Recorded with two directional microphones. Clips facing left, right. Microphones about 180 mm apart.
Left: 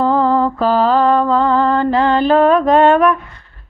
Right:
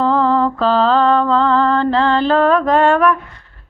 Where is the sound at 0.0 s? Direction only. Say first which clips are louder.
Left 1 dB; 10° left (ahead or behind).